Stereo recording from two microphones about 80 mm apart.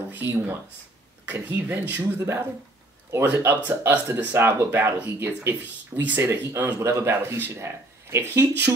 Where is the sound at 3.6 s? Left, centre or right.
Right.